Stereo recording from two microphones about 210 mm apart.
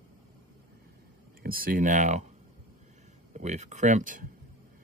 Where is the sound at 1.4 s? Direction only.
45° right (ahead or behind).